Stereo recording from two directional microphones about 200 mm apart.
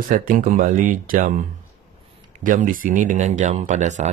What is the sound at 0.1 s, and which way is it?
Speech, 45° right (ahead or behind).